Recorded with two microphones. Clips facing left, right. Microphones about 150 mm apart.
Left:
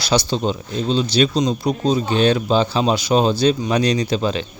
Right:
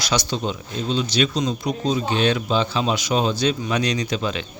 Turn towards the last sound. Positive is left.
turn(degrees=35)  # may be behind; listen again after turning